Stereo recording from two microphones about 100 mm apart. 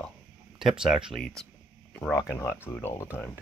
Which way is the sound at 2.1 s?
25° left (ahead or behind).